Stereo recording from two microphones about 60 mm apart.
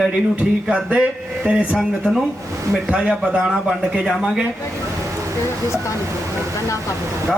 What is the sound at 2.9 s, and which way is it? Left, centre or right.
Speech, centre.